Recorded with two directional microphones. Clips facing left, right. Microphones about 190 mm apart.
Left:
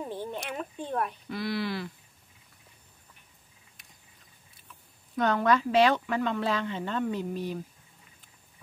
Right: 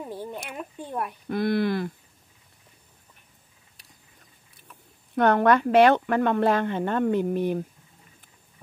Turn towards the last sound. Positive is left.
turn(degrees=-55)  # may be behind; listen again after turning